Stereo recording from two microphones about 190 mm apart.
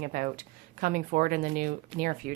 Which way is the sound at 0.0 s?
45° right (ahead or behind).